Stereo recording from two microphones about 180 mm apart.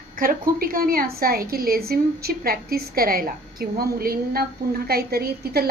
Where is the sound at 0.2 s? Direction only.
50° right (ahead or behind).